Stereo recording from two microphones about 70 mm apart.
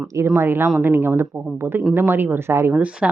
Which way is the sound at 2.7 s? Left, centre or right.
Centre.